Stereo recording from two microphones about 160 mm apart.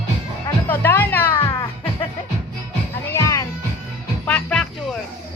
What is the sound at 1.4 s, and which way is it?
Music, 25° left (ahead or behind).